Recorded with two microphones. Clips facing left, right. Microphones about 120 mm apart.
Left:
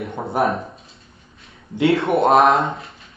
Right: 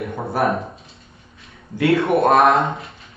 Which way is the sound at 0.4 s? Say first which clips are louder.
Even; 25° left (ahead or behind).